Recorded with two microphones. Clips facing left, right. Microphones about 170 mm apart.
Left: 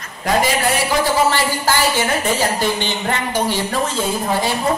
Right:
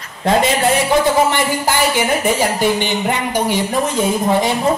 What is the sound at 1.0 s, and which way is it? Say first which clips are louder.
A man's voice: right 2 dB; 20° right (ahead or behind).